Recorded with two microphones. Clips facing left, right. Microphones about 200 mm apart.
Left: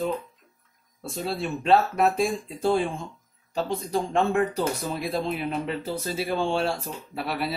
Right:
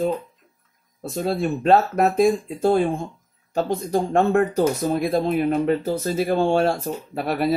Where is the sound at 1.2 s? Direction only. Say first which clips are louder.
Right 6 dB; 45° right (ahead or behind).